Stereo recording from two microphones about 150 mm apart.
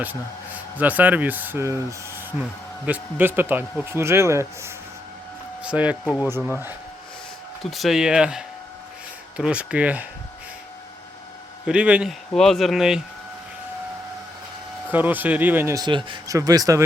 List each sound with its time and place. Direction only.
0.0 s speech: 10° right (ahead or behind)
7.6 s speech: centre (ahead or behind)
11.6 s speech: 5° right (ahead or behind)
14.8 s a man's voice: 10° right (ahead or behind)